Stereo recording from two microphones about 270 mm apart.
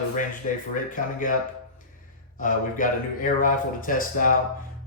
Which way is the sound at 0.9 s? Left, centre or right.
Left.